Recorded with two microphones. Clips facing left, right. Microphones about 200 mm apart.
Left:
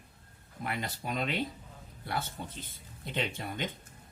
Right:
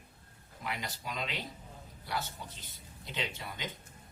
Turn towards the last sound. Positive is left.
turn(degrees=55)  # may be behind; listen again after turning